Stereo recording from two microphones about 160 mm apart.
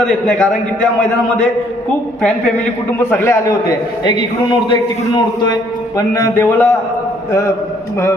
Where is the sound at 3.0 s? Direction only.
15° left (ahead or behind).